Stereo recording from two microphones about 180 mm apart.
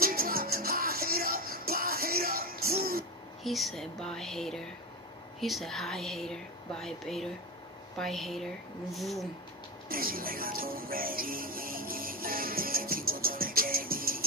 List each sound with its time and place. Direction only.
0.0 s music: 55° right (ahead or behind)
3.4 s speech: centre (ahead or behind)
9.8 s music: 55° right (ahead or behind)